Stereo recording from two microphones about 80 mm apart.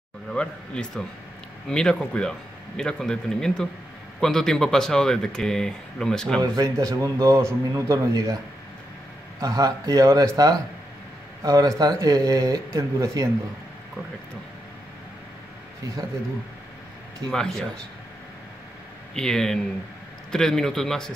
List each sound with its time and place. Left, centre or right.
0.3 s speech: centre
6.4 s speech: right
9.4 s speech: right
17.3 s speech: centre
19.1 s speech: centre